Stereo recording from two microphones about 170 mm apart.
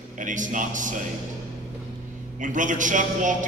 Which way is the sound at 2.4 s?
50° right (ahead or behind).